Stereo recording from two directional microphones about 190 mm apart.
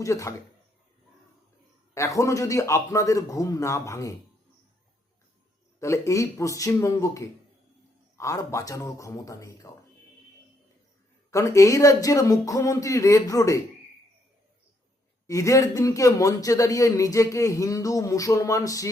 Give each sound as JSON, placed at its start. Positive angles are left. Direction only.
{"t": 0.0, "sound": "a man's voice", "side_deg": 15}
{"t": 2.0, "sound": "a man's voice", "side_deg": 15}
{"t": 5.8, "sound": "a man's voice", "side_deg": 15}
{"t": 11.3, "sound": "a man's voice", "side_deg": 15}
{"t": 15.3, "sound": "a man's voice", "side_deg": 15}